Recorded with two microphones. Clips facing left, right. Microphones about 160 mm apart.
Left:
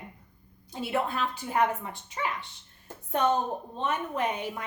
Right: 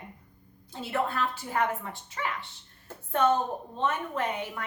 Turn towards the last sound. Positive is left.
turn(degrees=15)  # may be behind; listen again after turning